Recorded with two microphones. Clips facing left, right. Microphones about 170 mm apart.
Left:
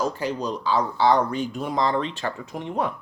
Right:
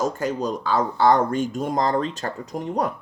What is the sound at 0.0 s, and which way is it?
Speech, 45° right (ahead or behind).